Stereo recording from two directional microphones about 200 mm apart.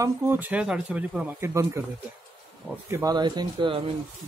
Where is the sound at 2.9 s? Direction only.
20° right (ahead or behind).